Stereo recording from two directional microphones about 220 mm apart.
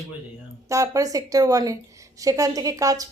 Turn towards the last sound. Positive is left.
turn(degrees=-15)  # may be behind; listen again after turning